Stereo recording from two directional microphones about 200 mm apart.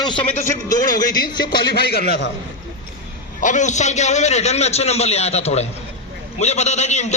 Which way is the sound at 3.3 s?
40° left (ahead or behind).